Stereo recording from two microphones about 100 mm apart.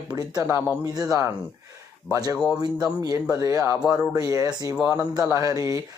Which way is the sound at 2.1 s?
40° right (ahead or behind).